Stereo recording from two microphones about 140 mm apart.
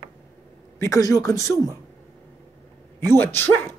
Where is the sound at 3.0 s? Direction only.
15° left (ahead or behind).